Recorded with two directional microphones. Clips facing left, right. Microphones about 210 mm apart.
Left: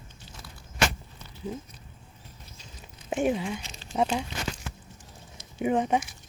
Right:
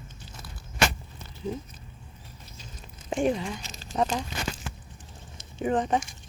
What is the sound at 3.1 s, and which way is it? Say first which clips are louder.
Speech: even; 5° left (ahead or behind).